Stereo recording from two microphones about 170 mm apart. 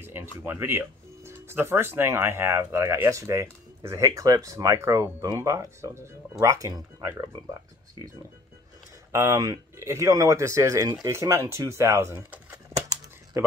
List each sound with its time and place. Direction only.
0.0 s a sound: 15° right (ahead or behind)
0.5 s speech: 15° right (ahead or behind)
9.1 s speech: 15° right (ahead or behind)